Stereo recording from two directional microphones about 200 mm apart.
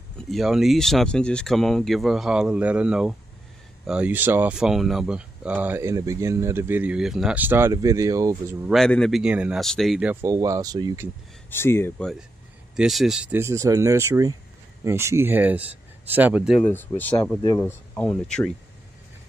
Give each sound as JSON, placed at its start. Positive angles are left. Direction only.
{"t": 0.3, "sound": "speech", "side_deg": 0}
{"t": 8.6, "sound": "speech", "side_deg": 0}
{"t": 10.2, "sound": "speech", "side_deg": -15}
{"t": 11.5, "sound": "speech", "side_deg": 10}
{"t": 12.7, "sound": "speech", "side_deg": 0}
{"t": 16.6, "sound": "speech", "side_deg": 10}